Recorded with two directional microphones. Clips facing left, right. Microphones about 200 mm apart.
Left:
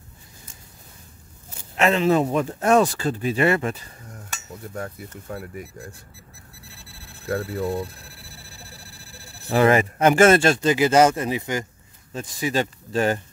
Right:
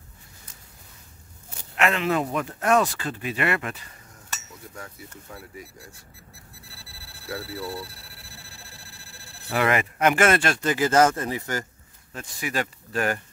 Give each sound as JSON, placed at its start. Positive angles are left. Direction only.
{"t": 1.8, "sound": "speech", "side_deg": 30}
{"t": 4.7, "sound": "speech", "side_deg": 55}
{"t": 7.2, "sound": "speech", "side_deg": 50}
{"t": 9.5, "sound": "speech", "side_deg": 30}